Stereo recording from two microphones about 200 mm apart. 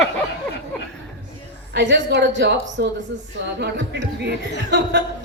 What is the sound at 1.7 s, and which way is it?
A woman's voice, 60° right (ahead or behind).